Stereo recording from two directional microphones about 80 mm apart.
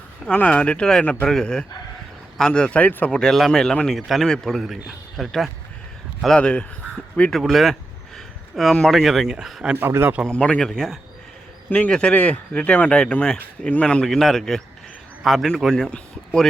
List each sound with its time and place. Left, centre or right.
0.3 s speech: centre
6.2 s speech: centre
7.3 s a sound: centre
8.9 s speech: centre
9.8 s a man's voice: right
10.2 s speech: centre
11.7 s speech: centre